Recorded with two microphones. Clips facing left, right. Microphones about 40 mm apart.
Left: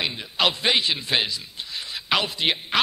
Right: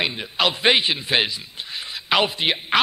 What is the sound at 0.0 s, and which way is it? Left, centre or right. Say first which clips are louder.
Speech: right 2 dB; centre.